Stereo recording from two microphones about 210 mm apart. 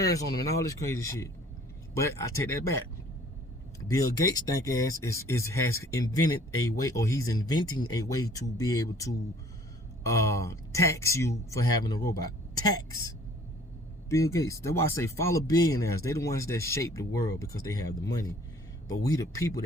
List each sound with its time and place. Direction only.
0.0 s speech: 15° left (ahead or behind)
3.8 s speech: 15° left (ahead or behind)
14.1 s speech: 15° left (ahead or behind)